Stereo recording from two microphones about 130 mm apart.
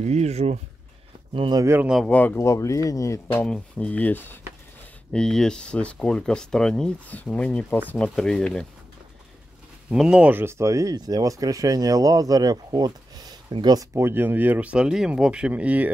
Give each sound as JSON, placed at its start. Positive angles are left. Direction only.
{"t": 0.0, "sound": "speech", "side_deg": -55}
{"t": 1.3, "sound": "speech", "side_deg": -40}
{"t": 1.6, "sound": "speech", "side_deg": -20}
{"t": 2.0, "sound": "a man's voice", "side_deg": 10}
{"t": 3.4, "sound": "speech", "side_deg": 5}
{"t": 9.8, "sound": "speech", "side_deg": -5}
{"t": 13.9, "sound": "speech", "side_deg": -15}